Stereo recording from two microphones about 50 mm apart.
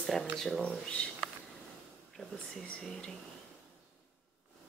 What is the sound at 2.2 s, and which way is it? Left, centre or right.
Whispering, centre.